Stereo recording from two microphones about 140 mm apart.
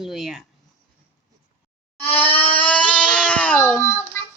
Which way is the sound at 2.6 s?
10° left (ahead or behind).